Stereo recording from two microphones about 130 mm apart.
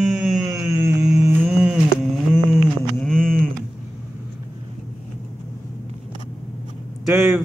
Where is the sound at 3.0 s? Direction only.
5° left (ahead or behind).